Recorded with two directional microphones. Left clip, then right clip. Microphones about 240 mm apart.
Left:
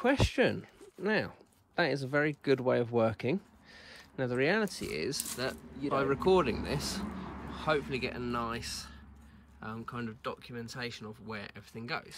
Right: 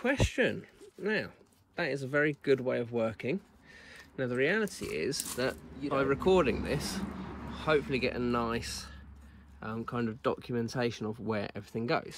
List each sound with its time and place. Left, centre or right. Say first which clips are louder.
0.0 s speech: left 1 dB; left; by 12.2 s centre